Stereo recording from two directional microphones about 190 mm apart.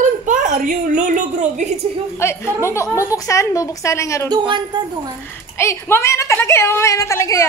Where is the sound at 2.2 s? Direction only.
15° left (ahead or behind).